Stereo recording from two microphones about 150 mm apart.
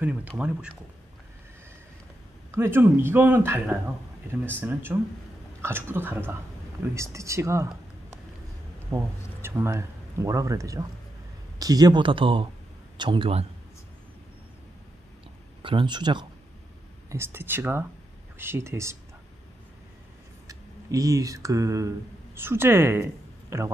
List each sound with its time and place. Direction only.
0.0 s speech: 10° right (ahead or behind)
2.5 s speech: 15° right (ahead or behind)
8.9 s speech: 20° right (ahead or behind); by 13.5 s 40° right (ahead or behind)
15.6 s speech: 35° right (ahead or behind)
17.1 s speech: 15° right (ahead or behind)
20.4 s speech: 20° right (ahead or behind)